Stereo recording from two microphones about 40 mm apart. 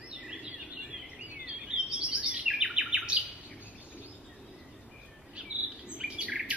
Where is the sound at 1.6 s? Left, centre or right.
Right.